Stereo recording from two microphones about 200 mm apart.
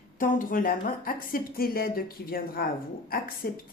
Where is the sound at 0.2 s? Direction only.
45° left (ahead or behind).